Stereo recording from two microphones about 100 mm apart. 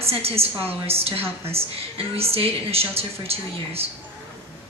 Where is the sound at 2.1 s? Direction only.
80° right.